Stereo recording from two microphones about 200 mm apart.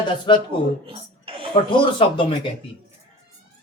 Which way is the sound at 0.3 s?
25° left (ahead or behind).